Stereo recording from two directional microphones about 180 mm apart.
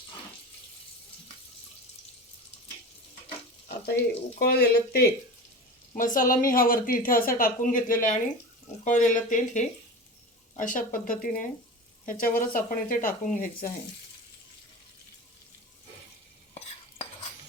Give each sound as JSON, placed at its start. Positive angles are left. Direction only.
{"t": 3.8, "sound": "speech", "side_deg": 60}
{"t": 5.9, "sound": "speech", "side_deg": 50}